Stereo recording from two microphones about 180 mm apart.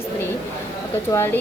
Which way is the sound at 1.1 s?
15° left (ahead or behind).